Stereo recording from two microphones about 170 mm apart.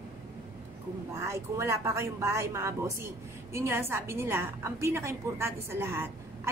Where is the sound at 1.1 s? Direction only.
15° right (ahead or behind).